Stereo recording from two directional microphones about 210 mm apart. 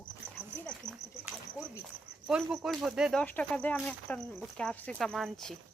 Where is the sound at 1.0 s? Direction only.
55° left (ahead or behind).